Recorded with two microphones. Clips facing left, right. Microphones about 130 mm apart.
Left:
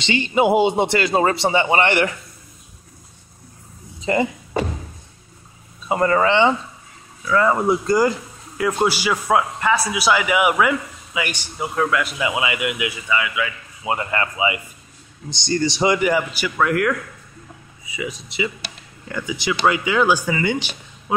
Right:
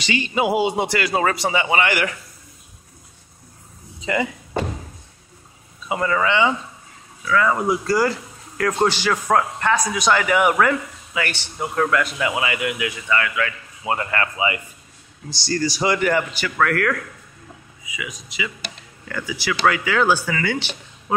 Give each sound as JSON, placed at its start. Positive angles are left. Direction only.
{"t": 0.0, "sound": "a man's voice", "side_deg": 25}
{"t": 4.0, "sound": "speech", "side_deg": 35}
{"t": 5.9, "sound": "a man's voice", "side_deg": 40}
{"t": 16.0, "sound": "speech", "side_deg": 10}
{"t": 17.8, "sound": "speech", "side_deg": 30}
{"t": 19.0, "sound": "a man's voice", "side_deg": 20}